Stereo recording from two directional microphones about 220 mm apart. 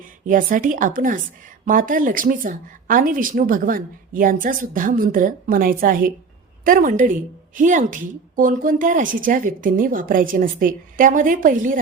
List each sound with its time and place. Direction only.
0.3 s a woman's voice: 40° right (ahead or behind)